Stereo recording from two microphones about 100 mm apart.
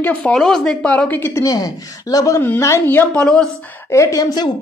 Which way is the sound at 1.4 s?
35° left (ahead or behind).